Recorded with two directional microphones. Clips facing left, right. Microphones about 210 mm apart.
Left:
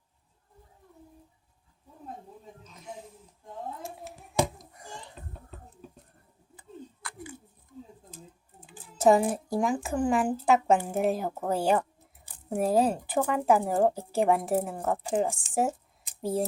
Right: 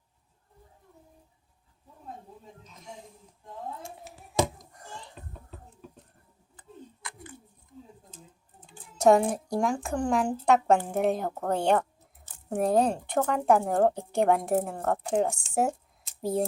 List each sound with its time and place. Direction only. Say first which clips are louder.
3.8 s hands: left 3 dB; centre (ahead or behind)
8.6 s speech: right 1 dB; 5° left (ahead or behind)